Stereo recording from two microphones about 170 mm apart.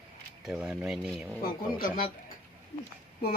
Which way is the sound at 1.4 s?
55° left (ahead or behind).